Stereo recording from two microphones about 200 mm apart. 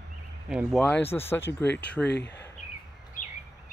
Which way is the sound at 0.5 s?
Centre (ahead or behind).